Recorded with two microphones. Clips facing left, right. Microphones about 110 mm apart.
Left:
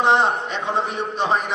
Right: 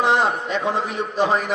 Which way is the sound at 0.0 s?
20° left (ahead or behind).